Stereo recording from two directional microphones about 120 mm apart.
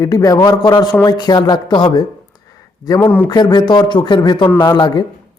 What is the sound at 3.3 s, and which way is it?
Speech, 35° left (ahead or behind).